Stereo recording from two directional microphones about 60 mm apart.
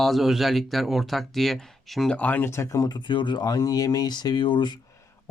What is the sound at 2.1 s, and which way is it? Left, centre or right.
Speech, left.